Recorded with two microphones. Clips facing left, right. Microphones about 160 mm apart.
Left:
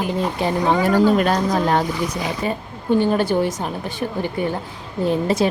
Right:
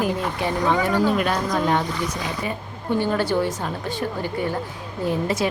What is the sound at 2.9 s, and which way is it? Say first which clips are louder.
Speech: left 4 dB; 20° left (ahead or behind).